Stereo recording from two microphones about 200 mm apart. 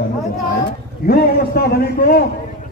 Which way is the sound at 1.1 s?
50° left (ahead or behind).